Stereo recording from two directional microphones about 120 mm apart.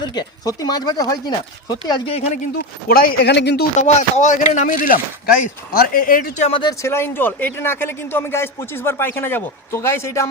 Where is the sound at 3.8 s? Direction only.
70° left (ahead or behind); by 4.9 s 90° left.